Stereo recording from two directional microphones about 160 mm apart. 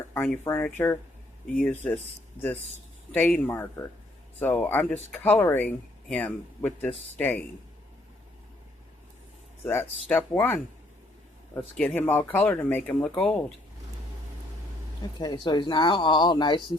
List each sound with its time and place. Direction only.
0.1 s speech: 10° left (ahead or behind)
3.1 s speech: 5° left (ahead or behind)
9.6 s speech: 15° left (ahead or behind)
11.8 s speech: 10° left (ahead or behind)
15.2 s speech: 30° left (ahead or behind)